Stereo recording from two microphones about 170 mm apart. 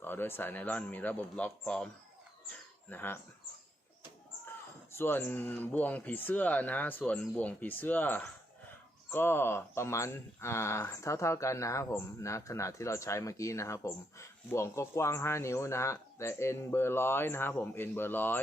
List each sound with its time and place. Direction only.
0.0 s speech: 10° left (ahead or behind)
2.9 s speech: 10° left (ahead or behind)
4.9 s speech: 10° left (ahead or behind)